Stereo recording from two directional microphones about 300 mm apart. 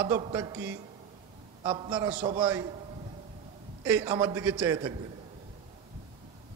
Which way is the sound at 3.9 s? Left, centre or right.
Centre.